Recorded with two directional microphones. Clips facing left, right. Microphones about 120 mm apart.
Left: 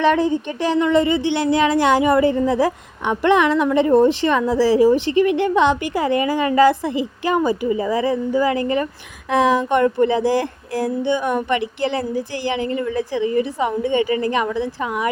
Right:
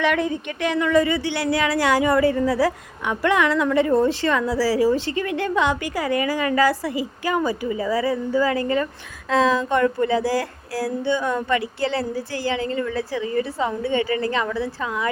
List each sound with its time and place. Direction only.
0.0 s a woman's voice: 30° left (ahead or behind)